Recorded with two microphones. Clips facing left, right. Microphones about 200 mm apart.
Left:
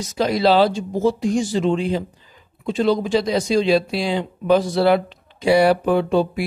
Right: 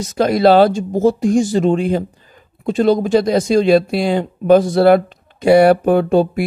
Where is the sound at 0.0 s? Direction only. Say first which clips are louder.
Right 5 dB; 50° right (ahead or behind).